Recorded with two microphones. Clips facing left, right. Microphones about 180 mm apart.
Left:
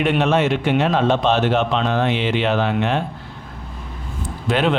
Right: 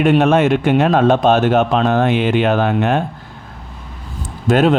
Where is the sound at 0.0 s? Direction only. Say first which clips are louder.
Right 5 dB; 50° right (ahead or behind).